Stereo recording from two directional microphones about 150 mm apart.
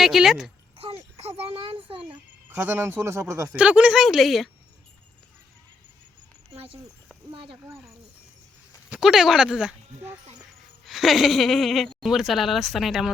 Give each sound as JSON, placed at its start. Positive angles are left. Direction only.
{"t": 0.0, "sound": "speech", "side_deg": 0}
{"t": 0.8, "sound": "a sound", "side_deg": -40}
{"t": 2.6, "sound": "speech", "side_deg": -15}
{"t": 3.5, "sound": "speech", "side_deg": -10}
{"t": 6.5, "sound": "a sound", "side_deg": -40}
{"t": 7.3, "sound": "speech", "side_deg": -35}
{"t": 8.9, "sound": "speech", "side_deg": -5}